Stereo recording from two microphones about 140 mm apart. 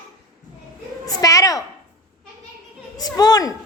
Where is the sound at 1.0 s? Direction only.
25° left (ahead or behind).